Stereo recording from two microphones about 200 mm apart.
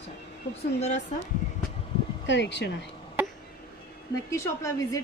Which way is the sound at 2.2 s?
60° left (ahead or behind).